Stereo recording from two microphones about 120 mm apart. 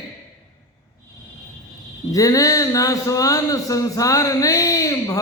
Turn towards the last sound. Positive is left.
turn(degrees=30)  # may be behind; listen again after turning